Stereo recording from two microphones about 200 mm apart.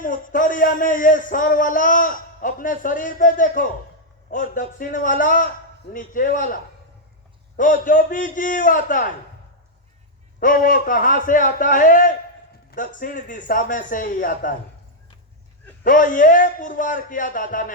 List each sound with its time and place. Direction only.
0.0 s a man's voice: 40° left (ahead or behind)
10.4 s a man's voice: 45° left (ahead or behind)
15.8 s speech: 45° left (ahead or behind)